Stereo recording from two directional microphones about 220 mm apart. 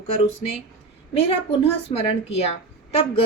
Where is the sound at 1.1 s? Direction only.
25° left (ahead or behind).